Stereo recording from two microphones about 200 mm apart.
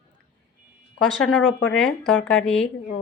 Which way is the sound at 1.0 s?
5° left (ahead or behind).